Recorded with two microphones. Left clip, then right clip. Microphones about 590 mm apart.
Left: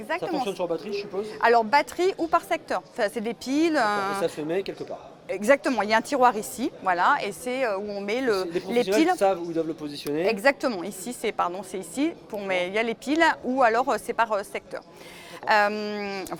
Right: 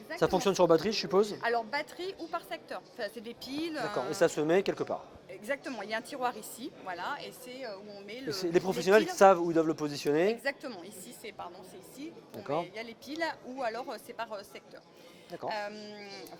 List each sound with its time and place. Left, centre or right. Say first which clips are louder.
0.2 s speech: right 1 dB; right
1.4 s speech: left 12 dB; left
4.2 s speech: even; right
5.3 s speech: left 15 dB; left
8.3 s speech: left 1 dB; right
10.2 s speech: left 10 dB; left
15.4 s speech: left 16 dB; left